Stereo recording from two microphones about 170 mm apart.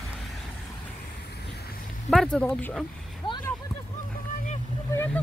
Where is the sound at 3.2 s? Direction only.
30° left (ahead or behind).